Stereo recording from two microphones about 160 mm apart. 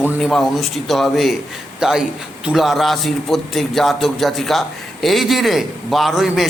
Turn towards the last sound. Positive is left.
turn(degrees=0)  # may be behind; listen again after turning